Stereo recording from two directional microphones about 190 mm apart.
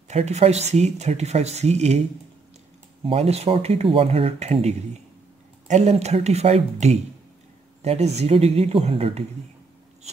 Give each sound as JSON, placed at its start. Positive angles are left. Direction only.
{"t": 0.1, "sound": "speech", "side_deg": -35}